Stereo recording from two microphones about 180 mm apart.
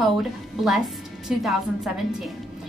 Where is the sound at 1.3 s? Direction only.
Centre (ahead or behind).